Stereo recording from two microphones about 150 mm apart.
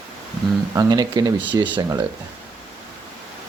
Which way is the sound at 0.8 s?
25° right (ahead or behind).